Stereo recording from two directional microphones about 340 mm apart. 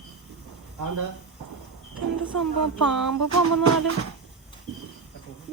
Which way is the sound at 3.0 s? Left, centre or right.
Right.